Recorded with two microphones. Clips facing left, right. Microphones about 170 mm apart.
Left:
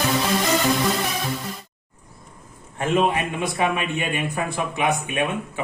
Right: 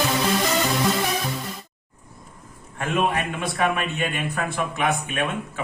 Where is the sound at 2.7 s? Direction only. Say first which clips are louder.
Left 3 dB; 20° left (ahead or behind).